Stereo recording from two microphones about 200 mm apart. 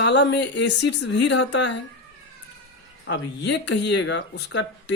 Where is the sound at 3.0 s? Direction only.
65° left (ahead or behind).